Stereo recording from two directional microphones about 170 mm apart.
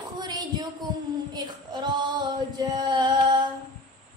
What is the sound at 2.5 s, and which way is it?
Child singing, 25° right (ahead or behind).